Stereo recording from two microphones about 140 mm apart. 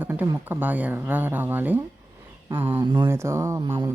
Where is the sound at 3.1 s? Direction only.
20° right (ahead or behind).